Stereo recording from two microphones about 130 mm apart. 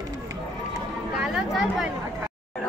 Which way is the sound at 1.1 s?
5° right (ahead or behind).